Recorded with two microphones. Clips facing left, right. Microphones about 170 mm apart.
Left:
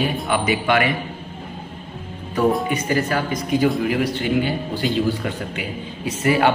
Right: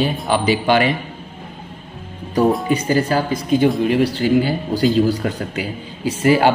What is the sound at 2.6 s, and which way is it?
A man's voice, 30° right (ahead or behind).